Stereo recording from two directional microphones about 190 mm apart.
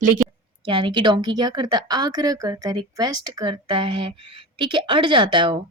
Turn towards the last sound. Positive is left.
turn(degrees=-25)  # may be behind; listen again after turning